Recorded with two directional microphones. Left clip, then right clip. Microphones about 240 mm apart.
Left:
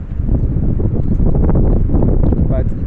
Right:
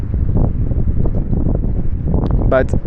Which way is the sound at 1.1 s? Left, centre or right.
Left.